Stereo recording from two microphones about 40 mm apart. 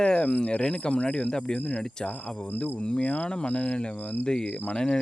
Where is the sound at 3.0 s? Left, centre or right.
Left.